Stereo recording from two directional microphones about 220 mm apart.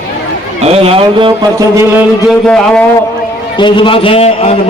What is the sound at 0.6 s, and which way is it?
Speech, 25° right (ahead or behind).